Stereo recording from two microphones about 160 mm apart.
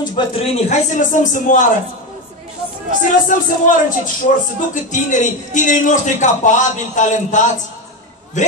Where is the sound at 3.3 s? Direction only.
55° left (ahead or behind).